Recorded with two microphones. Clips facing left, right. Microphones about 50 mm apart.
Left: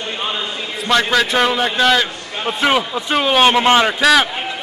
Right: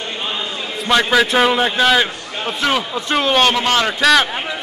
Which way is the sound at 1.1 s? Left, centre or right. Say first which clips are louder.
Right 2 dB; centre.